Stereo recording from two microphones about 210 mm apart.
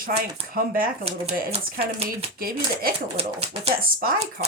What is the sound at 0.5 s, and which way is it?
Speech, 45° right (ahead or behind).